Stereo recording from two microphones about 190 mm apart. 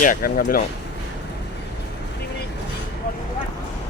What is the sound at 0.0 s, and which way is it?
Speech, 45° left (ahead or behind).